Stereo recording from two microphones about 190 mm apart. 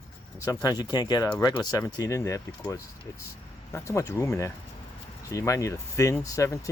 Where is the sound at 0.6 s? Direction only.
20° left (ahead or behind).